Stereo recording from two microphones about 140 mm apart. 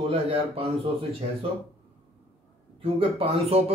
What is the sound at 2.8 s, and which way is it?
Speech, 40° right (ahead or behind).